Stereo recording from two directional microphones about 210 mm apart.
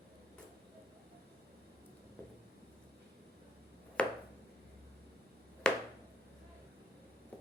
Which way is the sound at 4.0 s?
5° left (ahead or behind).